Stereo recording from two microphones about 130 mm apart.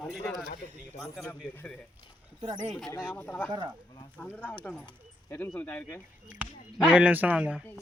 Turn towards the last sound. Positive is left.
turn(degrees=-10)  # may be behind; listen again after turning